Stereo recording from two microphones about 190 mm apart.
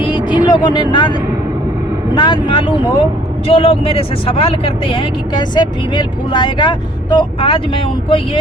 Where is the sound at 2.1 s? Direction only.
25° left (ahead or behind).